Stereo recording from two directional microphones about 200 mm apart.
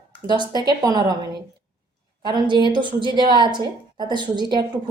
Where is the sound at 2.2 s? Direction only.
20° right (ahead or behind).